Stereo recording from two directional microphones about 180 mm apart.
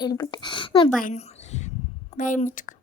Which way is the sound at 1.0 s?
45° left (ahead or behind).